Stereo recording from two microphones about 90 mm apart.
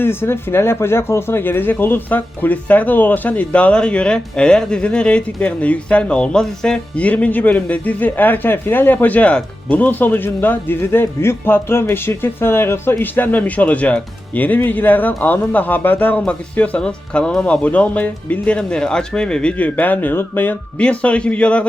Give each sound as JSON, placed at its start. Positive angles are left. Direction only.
{"t": 0.0, "sound": "speech", "side_deg": 25}